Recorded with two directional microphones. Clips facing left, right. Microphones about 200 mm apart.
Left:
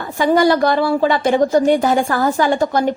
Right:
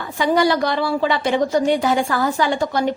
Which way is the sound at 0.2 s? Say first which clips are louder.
Left 4 dB; 45° left (ahead or behind).